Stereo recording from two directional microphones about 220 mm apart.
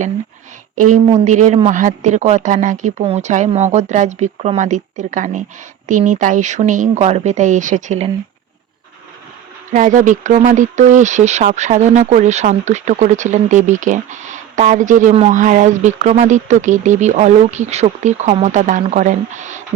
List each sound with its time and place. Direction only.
0.8 s speech: 35° right (ahead or behind)
9.7 s speech: 35° right (ahead or behind)